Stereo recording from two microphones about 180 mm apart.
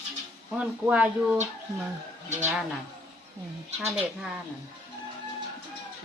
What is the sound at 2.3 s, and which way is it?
Speech, 40° right (ahead or behind).